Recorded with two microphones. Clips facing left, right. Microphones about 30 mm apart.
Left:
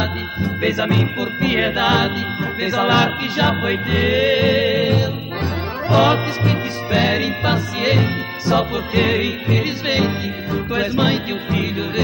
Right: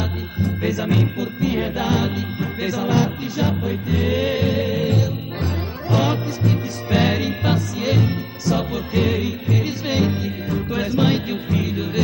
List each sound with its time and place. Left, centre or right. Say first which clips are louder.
0.0 s music: left 3 dB; left
1.4 s music: left 5 dB; left
2.7 s music: left 5 dB; left
4.0 s music: left 5 dB; left
4.5 s music: left 5 dB; left
6.1 s music: left 3 dB; left
6.9 s music: left 1 dB; centre